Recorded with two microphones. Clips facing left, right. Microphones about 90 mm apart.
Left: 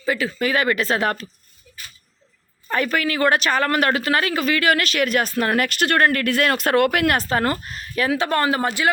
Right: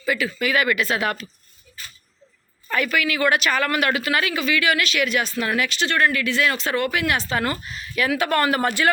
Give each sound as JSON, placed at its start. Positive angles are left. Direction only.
{"t": 0.0, "sound": "speech", "side_deg": 30}
{"t": 2.6, "sound": "speech", "side_deg": 35}